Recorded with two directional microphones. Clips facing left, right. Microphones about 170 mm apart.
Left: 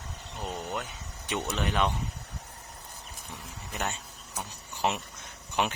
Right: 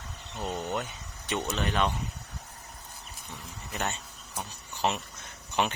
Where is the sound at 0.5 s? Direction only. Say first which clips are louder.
Right 3 dB; 5° right (ahead or behind).